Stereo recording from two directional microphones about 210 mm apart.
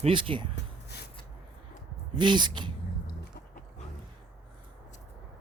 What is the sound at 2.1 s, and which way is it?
Speech, 20° right (ahead or behind).